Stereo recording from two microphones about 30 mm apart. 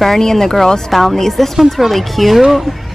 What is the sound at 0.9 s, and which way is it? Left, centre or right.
Speech, centre.